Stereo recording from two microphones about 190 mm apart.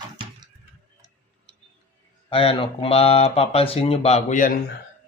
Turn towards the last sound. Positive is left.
turn(degrees=45)  # may be behind; listen again after turning